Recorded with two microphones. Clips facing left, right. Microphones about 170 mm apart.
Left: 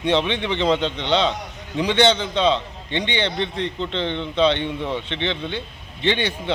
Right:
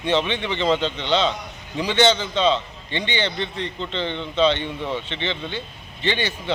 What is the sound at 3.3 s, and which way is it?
Speech, 65° left (ahead or behind).